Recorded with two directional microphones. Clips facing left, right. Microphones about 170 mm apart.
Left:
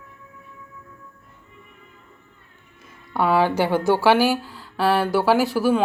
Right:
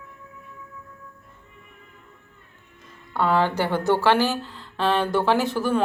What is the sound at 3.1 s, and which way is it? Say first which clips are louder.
A woman's voice: left 2 dB; 10° left (ahead or behind).